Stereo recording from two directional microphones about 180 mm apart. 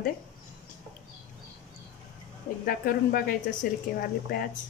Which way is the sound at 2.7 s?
50° left (ahead or behind).